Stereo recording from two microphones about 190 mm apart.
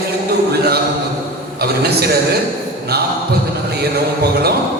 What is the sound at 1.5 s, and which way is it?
Speech, 55° right (ahead or behind).